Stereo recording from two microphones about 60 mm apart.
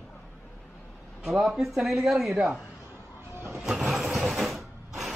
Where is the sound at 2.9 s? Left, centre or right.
Right.